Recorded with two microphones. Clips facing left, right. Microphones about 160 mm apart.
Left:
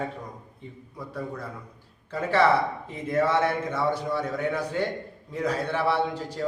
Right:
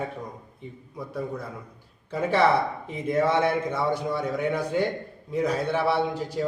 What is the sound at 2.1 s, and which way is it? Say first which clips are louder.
A man's voice: even; 15° right (ahead or behind).